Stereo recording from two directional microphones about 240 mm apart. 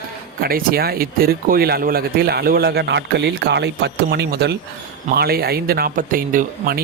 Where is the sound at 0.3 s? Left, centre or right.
Right.